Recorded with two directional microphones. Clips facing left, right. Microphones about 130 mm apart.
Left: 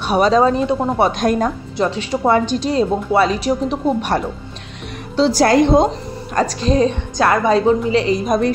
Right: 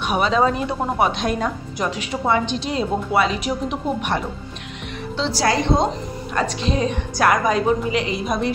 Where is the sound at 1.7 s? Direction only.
30° left (ahead or behind).